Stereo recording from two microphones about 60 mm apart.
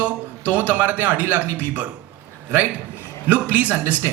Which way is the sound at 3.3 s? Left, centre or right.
Right.